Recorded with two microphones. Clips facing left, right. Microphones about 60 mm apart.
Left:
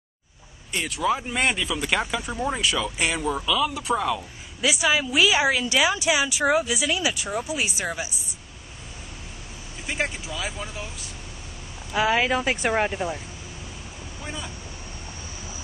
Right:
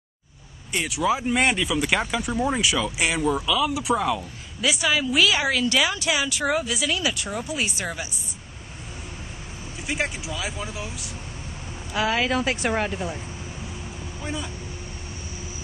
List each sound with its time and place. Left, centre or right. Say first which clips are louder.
0.7 s speech: right 1 dB; centre
9.8 s speech: right 1 dB; centre
11.9 s a woman's voice: left 2 dB; centre
12.7 s speech: left 2 dB; left
14.2 s speech: right 3 dB; centre